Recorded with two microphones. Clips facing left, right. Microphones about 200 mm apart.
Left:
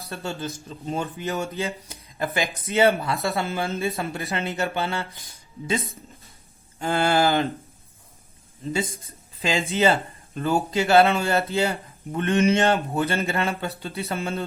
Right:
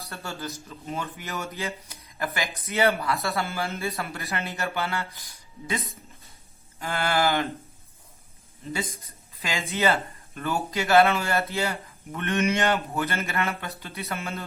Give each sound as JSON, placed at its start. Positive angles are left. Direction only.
{"t": 0.1, "sound": "speech", "side_deg": 25}
{"t": 8.7, "sound": "speech", "side_deg": 30}